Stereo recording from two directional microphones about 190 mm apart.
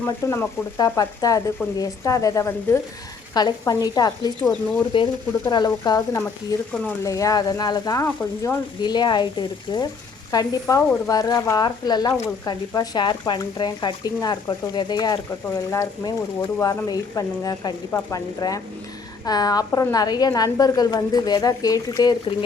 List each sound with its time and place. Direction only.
0.0 s a woman's voice: 15° left (ahead or behind)
8.0 s speech: 10° left (ahead or behind)
8.8 s a woman's voice: 20° left (ahead or behind)